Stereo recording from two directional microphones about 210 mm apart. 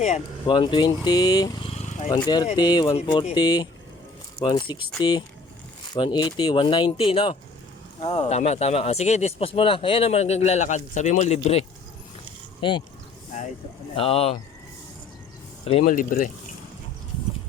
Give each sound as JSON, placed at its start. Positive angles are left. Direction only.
{"t": 0.0, "sound": "speech", "side_deg": 35}
{"t": 0.5, "sound": "speech", "side_deg": 20}
{"t": 2.1, "sound": "speech", "side_deg": 20}
{"t": 12.5, "sound": "speech", "side_deg": 25}
{"t": 13.9, "sound": "speech", "side_deg": 25}
{"t": 15.8, "sound": "speech", "side_deg": 40}